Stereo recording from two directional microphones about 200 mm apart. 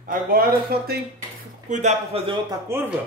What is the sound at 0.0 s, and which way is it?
Speech, 45° right (ahead or behind).